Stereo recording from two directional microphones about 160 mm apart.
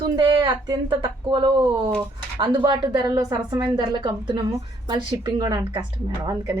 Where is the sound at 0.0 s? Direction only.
30° right (ahead or behind).